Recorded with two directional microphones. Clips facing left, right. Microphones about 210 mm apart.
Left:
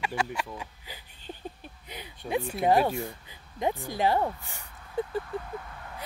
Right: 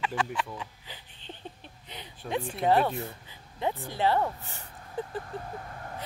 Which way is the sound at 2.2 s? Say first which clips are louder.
Left 1 dB; 10° left (ahead or behind).